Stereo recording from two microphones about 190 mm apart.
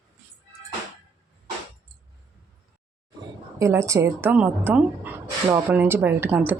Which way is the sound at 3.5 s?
15° right (ahead or behind).